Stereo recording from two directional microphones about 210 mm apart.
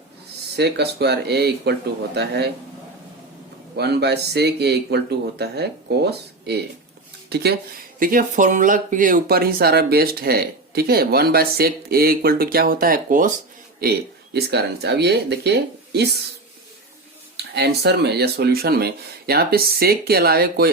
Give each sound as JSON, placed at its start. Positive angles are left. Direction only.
{"t": 0.5, "sound": "speech", "side_deg": -50}
{"t": 3.8, "sound": "speech", "side_deg": -50}
{"t": 14.3, "sound": "speech", "side_deg": -50}
{"t": 17.3, "sound": "speech", "side_deg": -50}